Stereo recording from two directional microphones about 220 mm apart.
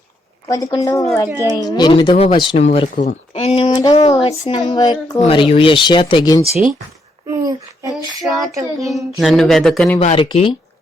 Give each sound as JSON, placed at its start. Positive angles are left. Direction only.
{"t": 0.4, "sound": "speech", "side_deg": 15}
{"t": 1.3, "sound": "a woman's voice", "side_deg": -10}
{"t": 1.5, "sound": "speech", "side_deg": 20}
{"t": 7.3, "sound": "a sound", "side_deg": -15}
{"t": 8.2, "sound": "speech", "side_deg": 0}
{"t": 10.0, "sound": "speech", "side_deg": 30}